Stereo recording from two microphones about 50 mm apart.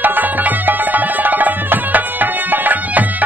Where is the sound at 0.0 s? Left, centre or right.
Right.